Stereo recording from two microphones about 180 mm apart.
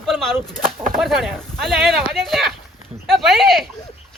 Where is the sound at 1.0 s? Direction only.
Centre (ahead or behind).